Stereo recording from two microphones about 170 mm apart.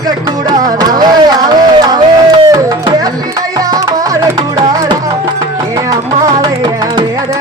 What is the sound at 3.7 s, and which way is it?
Music, 20° right (ahead or behind).